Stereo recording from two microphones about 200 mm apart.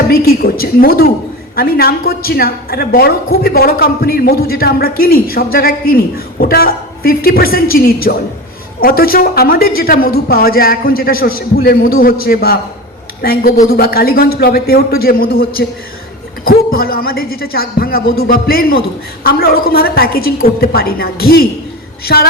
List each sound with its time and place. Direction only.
0.1 s a woman's voice: 50° left (ahead or behind)